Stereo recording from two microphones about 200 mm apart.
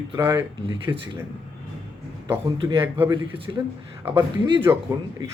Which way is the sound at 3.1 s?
25° right (ahead or behind).